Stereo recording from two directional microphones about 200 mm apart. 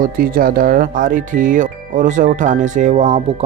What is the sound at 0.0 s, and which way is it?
Speech, 45° right (ahead or behind).